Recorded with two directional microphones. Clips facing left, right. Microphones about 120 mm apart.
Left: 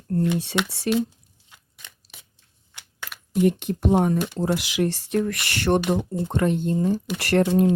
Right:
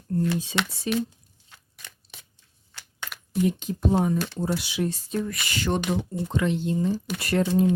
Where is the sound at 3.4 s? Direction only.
65° left (ahead or behind).